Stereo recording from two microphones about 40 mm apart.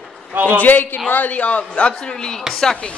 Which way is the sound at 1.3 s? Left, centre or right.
Left.